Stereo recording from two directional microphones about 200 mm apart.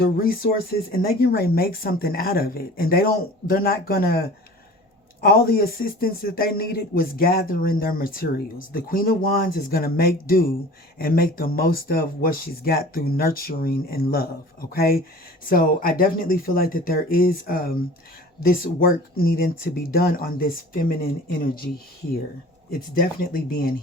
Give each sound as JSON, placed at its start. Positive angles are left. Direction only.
{"t": 0.0, "sound": "speech", "side_deg": 45}
{"t": 5.2, "sound": "speech", "side_deg": 50}
{"t": 23.0, "sound": "speech", "side_deg": 45}